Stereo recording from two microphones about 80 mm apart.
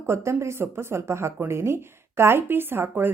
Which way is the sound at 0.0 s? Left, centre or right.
Right.